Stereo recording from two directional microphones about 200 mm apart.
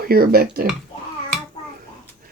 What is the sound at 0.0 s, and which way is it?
Speech, 50° right (ahead or behind).